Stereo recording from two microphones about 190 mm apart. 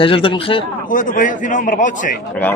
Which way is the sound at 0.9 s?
45° left (ahead or behind).